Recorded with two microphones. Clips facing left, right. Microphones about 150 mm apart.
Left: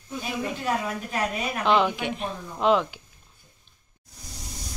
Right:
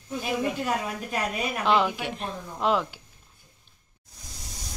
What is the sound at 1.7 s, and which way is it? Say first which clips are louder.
A woman's voice: left 2 dB; centre (ahead or behind).